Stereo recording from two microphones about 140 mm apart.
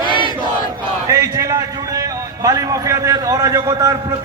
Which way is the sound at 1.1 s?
20° right (ahead or behind).